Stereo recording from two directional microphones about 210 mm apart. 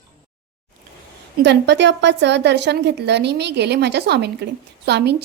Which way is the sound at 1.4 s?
55° right (ahead or behind).